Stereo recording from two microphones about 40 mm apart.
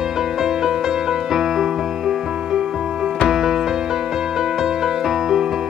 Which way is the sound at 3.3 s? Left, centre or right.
Centre.